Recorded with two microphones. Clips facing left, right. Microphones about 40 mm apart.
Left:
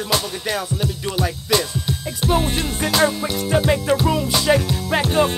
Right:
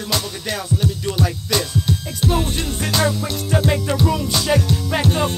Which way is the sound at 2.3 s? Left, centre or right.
Left.